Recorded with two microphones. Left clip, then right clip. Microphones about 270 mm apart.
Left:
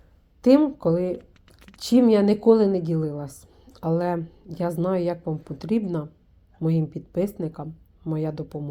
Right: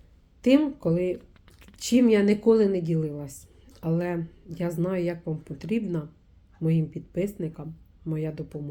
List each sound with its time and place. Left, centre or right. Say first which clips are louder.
0.4 s a woman's voice: left 4 dB; centre